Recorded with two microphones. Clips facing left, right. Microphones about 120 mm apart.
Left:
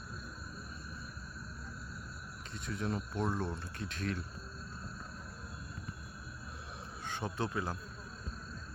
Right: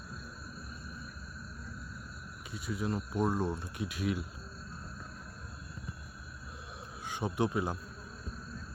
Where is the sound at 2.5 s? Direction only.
5° right (ahead or behind).